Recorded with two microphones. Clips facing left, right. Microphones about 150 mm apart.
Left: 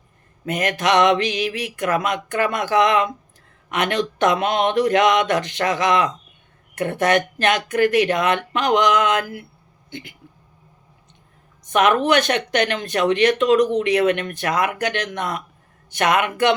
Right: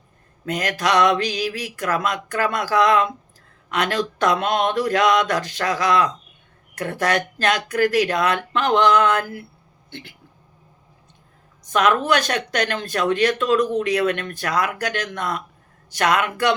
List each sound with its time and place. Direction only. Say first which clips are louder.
0.4 s speech: left 2 dB; 25° left (ahead or behind)
11.6 s speech: left 2 dB; 20° left (ahead or behind)